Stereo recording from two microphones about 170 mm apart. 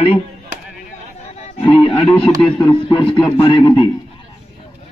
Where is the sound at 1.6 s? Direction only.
30° left (ahead or behind).